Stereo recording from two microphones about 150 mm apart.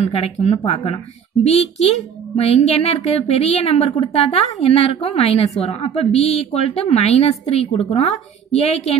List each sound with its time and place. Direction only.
0.0 s a woman's voice: 45° left (ahead or behind)